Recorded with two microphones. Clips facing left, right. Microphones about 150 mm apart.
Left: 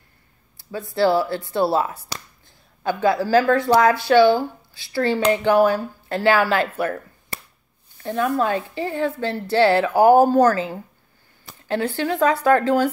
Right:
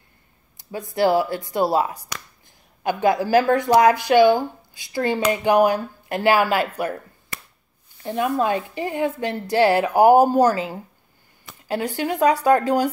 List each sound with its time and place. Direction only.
0.7 s speech: 20° right (ahead or behind)
8.0 s speech: 15° right (ahead or behind)
11.6 s a sound: 15° right (ahead or behind)
12.0 s speech: 15° right (ahead or behind)